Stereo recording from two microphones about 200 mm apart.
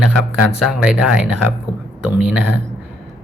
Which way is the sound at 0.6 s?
Centre (ahead or behind).